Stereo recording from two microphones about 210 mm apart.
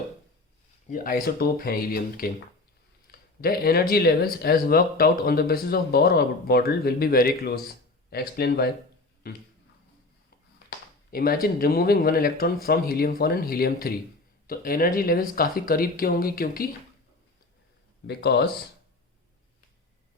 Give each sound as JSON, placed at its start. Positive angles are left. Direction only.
{"t": 0.9, "sound": "speech", "side_deg": 40}
{"t": 11.1, "sound": "speech", "side_deg": 45}
{"t": 18.0, "sound": "speech", "side_deg": 55}